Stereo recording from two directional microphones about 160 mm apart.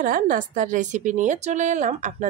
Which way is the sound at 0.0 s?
55° right (ahead or behind).